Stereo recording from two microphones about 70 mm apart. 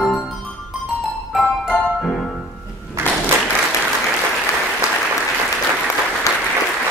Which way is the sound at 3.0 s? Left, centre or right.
Right.